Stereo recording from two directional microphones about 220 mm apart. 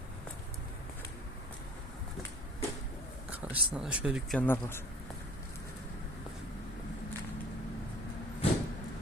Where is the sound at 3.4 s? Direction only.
5° right (ahead or behind).